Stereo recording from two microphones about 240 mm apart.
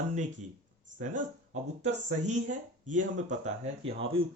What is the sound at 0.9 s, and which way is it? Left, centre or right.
Speech, right.